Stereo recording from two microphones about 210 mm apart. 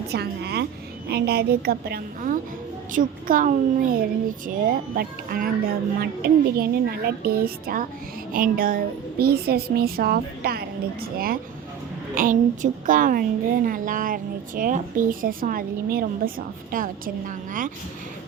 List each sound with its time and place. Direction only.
0.1 s a woman's voice: 50° right (ahead or behind)